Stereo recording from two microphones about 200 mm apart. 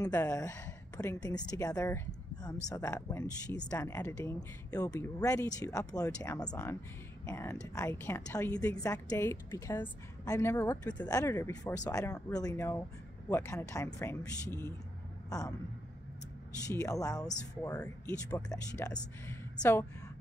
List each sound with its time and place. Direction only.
0.0 s a woman's voice: 15° left (ahead or behind)
16.6 s speech: 15° left (ahead or behind)
18.3 s speech: 15° left (ahead or behind)